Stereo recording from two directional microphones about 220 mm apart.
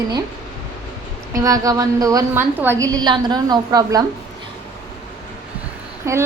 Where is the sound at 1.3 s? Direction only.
15° right (ahead or behind).